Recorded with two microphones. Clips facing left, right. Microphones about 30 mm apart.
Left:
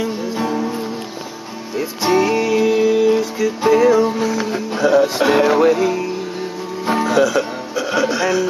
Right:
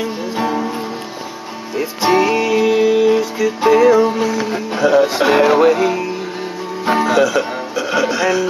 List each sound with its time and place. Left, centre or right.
0.0 s music: centre
1.8 s music: centre
6.9 s speech: centre